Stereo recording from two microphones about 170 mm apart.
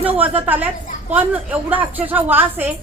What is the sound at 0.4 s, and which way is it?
A woman's voice, 10° right (ahead or behind).